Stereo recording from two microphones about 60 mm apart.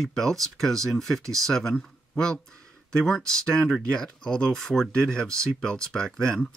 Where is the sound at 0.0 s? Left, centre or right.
Centre.